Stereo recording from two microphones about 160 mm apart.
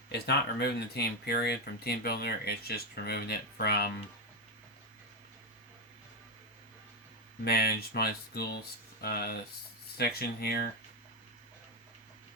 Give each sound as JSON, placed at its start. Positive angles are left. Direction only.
{"t": 0.1, "sound": "speech", "side_deg": 90}
{"t": 7.4, "sound": "speech", "side_deg": 75}